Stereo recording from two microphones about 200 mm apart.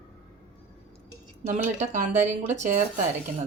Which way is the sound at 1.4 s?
35° right (ahead or behind).